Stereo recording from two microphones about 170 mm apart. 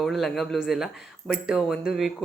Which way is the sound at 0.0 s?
Centre (ahead or behind).